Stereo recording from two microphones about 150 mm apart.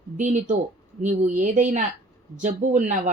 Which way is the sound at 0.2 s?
55° right (ahead or behind).